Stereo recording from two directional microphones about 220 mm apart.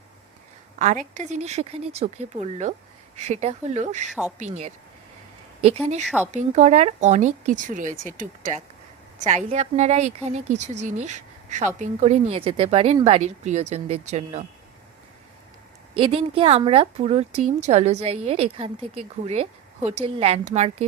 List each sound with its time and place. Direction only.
0.8 s a woman's voice: 35° right (ahead or behind)
6.3 s a woman's voice: 30° right (ahead or behind)
16.0 s a woman's voice: 25° right (ahead or behind)